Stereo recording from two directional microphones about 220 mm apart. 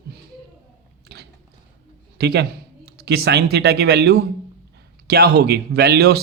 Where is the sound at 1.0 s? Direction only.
45° right (ahead or behind).